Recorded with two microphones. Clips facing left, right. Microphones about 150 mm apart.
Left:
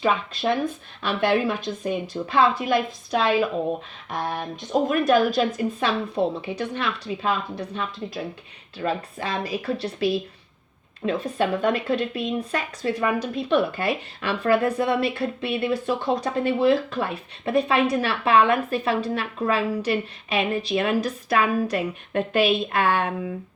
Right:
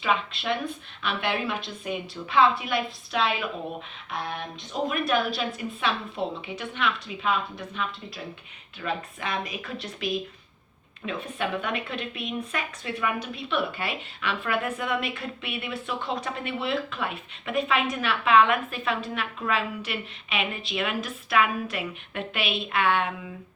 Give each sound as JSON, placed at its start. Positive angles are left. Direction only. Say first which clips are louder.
{"t": 1.0, "sound": "speech", "louder": "left 7 dB", "side_deg": 40}
{"t": 4.7, "sound": "speech", "louder": "left 7 dB", "side_deg": 45}